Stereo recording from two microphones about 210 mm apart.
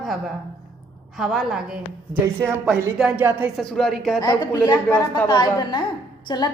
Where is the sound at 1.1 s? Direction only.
Centre (ahead or behind).